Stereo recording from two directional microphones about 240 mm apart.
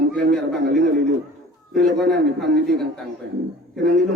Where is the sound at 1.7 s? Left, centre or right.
Right.